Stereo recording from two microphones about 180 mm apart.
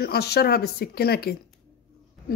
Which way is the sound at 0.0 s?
60° left (ahead or behind).